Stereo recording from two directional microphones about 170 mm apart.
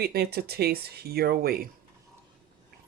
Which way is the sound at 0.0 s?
70° right (ahead or behind).